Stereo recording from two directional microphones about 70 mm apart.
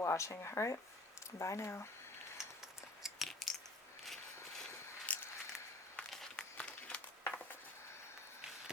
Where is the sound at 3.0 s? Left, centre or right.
Centre.